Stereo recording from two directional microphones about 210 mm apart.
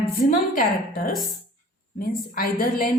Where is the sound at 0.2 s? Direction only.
40° left (ahead or behind).